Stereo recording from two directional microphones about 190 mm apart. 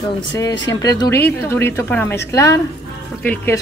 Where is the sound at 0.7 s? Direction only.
20° left (ahead or behind).